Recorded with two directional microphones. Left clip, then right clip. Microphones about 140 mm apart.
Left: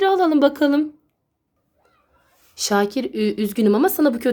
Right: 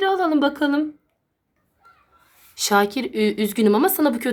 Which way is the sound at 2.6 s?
30° left (ahead or behind).